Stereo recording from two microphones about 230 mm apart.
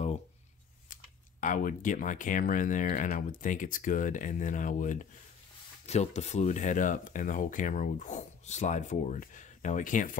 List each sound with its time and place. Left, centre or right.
1.4 s speech: left